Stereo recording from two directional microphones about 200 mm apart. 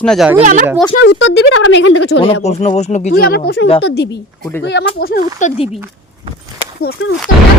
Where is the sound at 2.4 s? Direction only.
35° left (ahead or behind).